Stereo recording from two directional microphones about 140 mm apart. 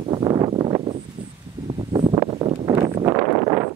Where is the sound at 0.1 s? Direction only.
30° right (ahead or behind).